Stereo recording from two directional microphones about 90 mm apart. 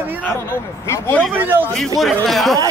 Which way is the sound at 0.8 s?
30° left (ahead or behind).